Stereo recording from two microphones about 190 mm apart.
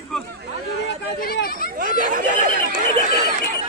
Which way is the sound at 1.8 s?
45° right (ahead or behind).